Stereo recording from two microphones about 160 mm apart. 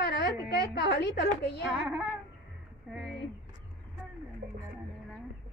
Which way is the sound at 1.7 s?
5° right (ahead or behind).